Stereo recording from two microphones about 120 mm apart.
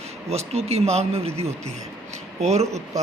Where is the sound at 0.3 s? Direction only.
60° right (ahead or behind).